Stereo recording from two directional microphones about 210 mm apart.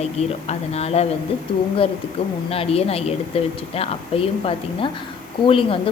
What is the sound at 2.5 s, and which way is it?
Speech, 30° left (ahead or behind).